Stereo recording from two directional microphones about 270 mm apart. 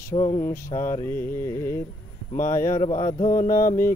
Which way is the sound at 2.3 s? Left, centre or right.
Left.